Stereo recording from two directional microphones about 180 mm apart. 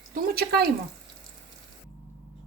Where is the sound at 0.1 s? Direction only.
60° right (ahead or behind).